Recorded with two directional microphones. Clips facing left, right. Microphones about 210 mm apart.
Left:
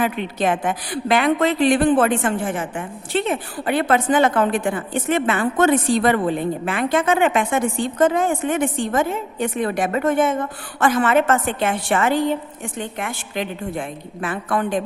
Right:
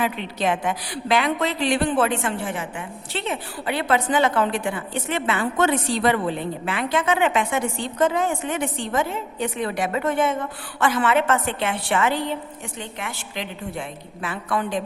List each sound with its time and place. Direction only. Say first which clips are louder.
0.0 s a woman's voice: left 3 dB; 50° left (ahead or behind)